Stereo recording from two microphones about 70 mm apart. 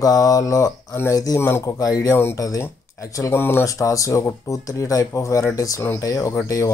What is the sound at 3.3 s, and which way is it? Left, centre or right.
Speech, left.